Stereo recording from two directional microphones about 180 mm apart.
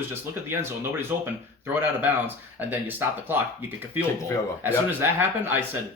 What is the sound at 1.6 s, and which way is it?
Speech, 10° right (ahead or behind).